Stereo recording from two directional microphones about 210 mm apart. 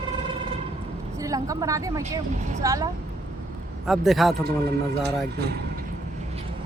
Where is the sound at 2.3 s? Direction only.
35° right (ahead or behind).